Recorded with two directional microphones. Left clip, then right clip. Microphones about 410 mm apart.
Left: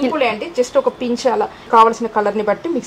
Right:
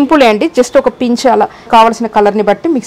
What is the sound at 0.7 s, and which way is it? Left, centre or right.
A woman's voice, right.